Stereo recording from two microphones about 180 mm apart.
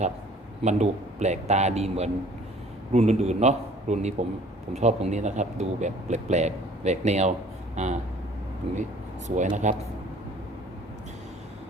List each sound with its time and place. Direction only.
0.6 s speech: 40° right (ahead or behind)